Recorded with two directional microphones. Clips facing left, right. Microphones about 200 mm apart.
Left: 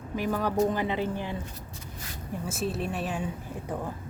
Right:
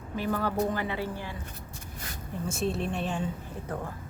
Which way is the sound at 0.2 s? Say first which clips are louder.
Left 2 dB; 15° left (ahead or behind).